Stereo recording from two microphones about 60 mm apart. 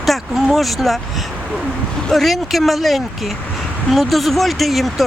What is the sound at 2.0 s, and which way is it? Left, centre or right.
Speech, centre.